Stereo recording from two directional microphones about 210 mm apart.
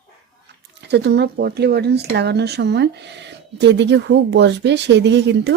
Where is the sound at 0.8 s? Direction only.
55° right (ahead or behind).